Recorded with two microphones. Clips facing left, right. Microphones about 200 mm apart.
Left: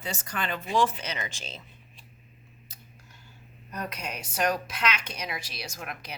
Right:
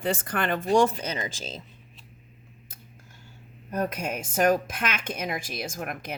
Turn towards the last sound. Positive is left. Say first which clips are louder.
# right 6 dB
turn(degrees=-50)  # may be behind; listen again after turning